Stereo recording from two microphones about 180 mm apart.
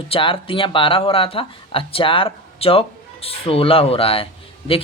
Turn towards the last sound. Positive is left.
turn(degrees=30)  # may be behind; listen again after turning